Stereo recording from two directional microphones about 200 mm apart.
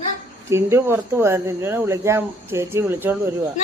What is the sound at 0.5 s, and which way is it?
Speech, 15° right (ahead or behind).